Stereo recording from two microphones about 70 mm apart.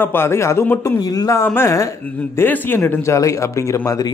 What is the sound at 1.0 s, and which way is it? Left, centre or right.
Speech, left.